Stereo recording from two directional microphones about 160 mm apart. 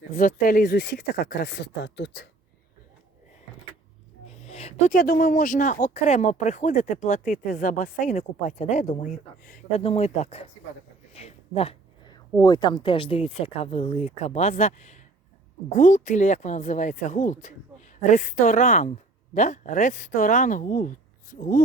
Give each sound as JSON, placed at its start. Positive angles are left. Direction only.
{"t": 0.1, "sound": "speech", "side_deg": 55}
{"t": 4.3, "sound": "a sound", "side_deg": 45}
{"t": 4.9, "sound": "speech", "side_deg": 60}
{"t": 9.7, "sound": "speech", "side_deg": 40}
{"t": 11.1, "sound": "a sound", "side_deg": 40}
{"t": 12.4, "sound": "a woman's voice", "side_deg": 25}